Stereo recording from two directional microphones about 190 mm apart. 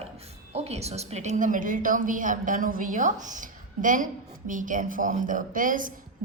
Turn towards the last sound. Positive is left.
turn(degrees=-45)  # may be behind; listen again after turning